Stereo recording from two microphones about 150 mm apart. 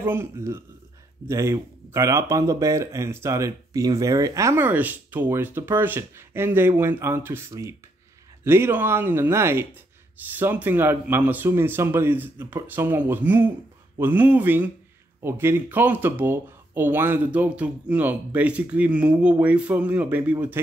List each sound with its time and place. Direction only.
0.0 s speech: 15° right (ahead or behind)